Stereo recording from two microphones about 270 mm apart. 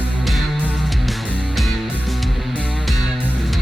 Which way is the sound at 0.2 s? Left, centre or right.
Centre.